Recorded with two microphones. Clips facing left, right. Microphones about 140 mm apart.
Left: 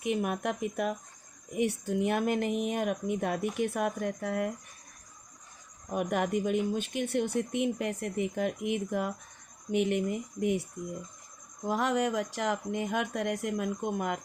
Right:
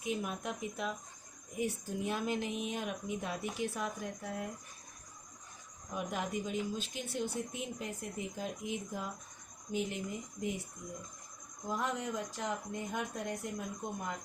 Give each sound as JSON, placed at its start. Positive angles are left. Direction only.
{"t": 0.0, "sound": "speech", "side_deg": 65}
{"t": 1.5, "sound": "speech", "side_deg": 70}
{"t": 5.9, "sound": "speech", "side_deg": 60}
{"t": 11.6, "sound": "speech", "side_deg": 75}